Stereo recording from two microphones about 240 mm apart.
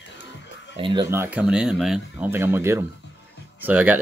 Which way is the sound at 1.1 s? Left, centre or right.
Centre.